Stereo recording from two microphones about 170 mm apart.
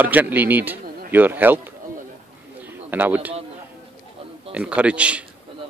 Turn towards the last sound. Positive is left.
turn(degrees=-5)  # may be behind; listen again after turning